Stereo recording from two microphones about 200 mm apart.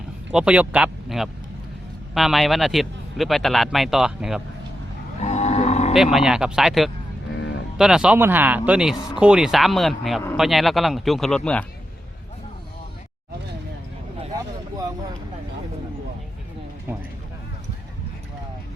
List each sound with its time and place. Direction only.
0.3 s speech: 5° right (ahead or behind)
5.2 s cattle: 35° left (ahead or behind)
5.9 s speech: centre (ahead or behind)
7.3 s music: 60° left (ahead or behind)
7.8 s speech: 5° right (ahead or behind)
14.3 s a sound: 20° right (ahead or behind)